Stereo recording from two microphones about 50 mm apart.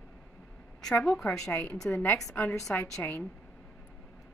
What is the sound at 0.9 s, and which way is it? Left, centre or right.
Speech, centre.